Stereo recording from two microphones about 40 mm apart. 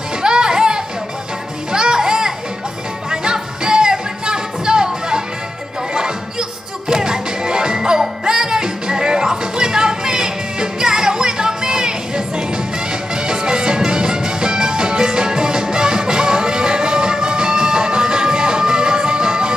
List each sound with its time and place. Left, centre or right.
0.2 s music: centre
6.9 s music: centre
13.1 s music: centre